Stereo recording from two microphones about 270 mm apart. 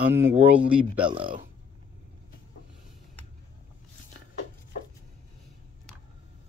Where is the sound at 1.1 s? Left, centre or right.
Centre.